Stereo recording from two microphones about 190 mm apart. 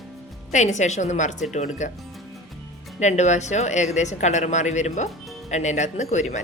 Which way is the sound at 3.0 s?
35° left (ahead or behind).